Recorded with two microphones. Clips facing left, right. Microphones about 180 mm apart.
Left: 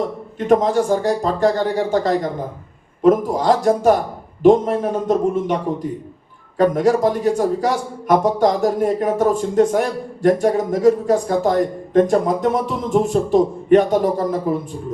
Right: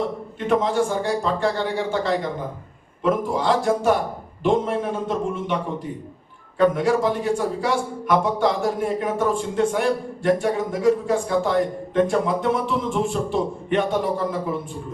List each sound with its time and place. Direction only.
0.3 s speech: 40° left (ahead or behind)
6.6 s speech: 40° left (ahead or behind)